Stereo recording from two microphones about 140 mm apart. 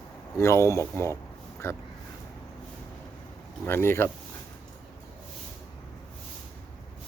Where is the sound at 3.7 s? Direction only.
15° left (ahead or behind).